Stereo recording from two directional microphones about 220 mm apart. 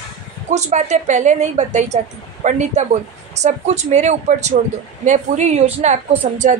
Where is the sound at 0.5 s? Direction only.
30° right (ahead or behind).